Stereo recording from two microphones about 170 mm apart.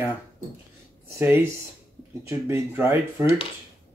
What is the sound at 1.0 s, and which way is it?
Speech, 15° right (ahead or behind).